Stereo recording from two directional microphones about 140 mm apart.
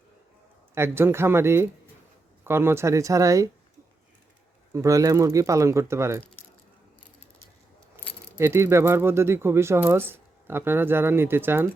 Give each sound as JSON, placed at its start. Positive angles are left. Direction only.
{"t": 0.7, "sound": "speech", "side_deg": -20}
{"t": 4.7, "sound": "speech", "side_deg": -25}
{"t": 7.9, "sound": "speech", "side_deg": -20}